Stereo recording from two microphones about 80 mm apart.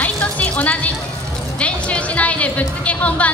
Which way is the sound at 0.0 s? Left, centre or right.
Centre.